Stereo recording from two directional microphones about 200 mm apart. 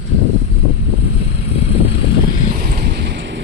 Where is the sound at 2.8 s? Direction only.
55° right (ahead or behind).